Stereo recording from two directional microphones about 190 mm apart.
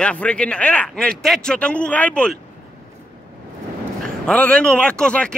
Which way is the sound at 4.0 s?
5° left (ahead or behind).